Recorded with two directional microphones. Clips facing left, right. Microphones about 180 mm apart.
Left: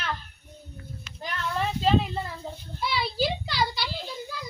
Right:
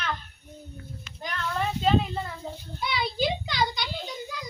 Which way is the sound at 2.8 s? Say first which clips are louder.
Even; 5° left (ahead or behind).